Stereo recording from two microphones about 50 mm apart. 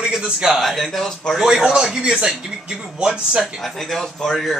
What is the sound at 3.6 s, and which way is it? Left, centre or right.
Speech, centre.